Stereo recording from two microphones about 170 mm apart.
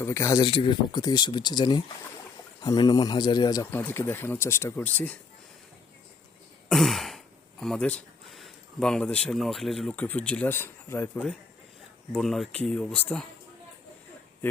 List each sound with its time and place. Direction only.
0.0 s a man's voice: 15° left (ahead or behind)
6.7 s throat clearing: centre (ahead or behind)
7.6 s a man's voice: 5° left (ahead or behind)
14.4 s speech: 10° left (ahead or behind)